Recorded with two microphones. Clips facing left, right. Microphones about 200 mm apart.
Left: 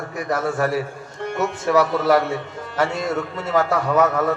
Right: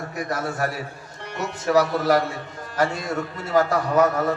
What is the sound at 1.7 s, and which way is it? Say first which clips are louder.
A man's voice: left 2 dB; 40° right (ahead or behind).